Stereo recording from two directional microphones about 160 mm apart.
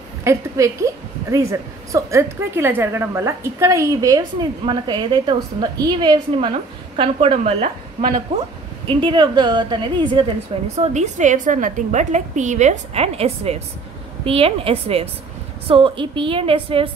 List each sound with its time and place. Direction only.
0.2 s a woman's voice: 15° right (ahead or behind)
10.8 s a woman's voice: 45° right (ahead or behind)